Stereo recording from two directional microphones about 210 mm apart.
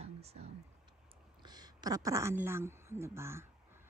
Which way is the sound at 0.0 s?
30° right (ahead or behind).